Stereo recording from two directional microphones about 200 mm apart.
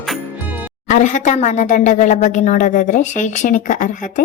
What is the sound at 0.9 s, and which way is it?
Speech, 40° left (ahead or behind).